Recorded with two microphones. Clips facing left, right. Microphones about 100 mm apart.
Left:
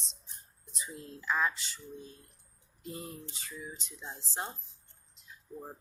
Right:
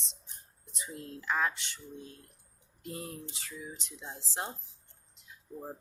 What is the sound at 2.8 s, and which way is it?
Speech, 70° right (ahead or behind).